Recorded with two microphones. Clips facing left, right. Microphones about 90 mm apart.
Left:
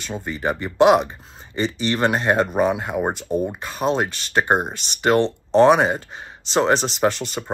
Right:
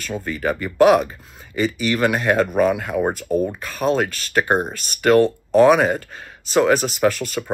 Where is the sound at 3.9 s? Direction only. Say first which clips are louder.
Right 1 dB; 25° left (ahead or behind).